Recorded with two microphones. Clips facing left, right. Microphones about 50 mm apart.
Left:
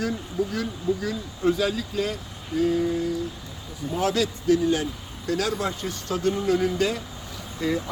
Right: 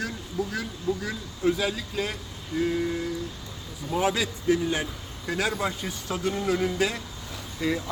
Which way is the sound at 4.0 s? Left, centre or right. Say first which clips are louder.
Left 2 dB; centre.